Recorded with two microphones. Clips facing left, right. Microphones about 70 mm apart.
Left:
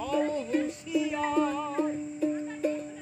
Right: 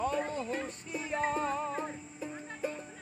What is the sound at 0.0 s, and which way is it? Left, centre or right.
Music, right.